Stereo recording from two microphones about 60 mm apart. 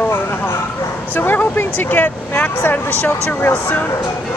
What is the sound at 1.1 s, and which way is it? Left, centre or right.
Speech, left.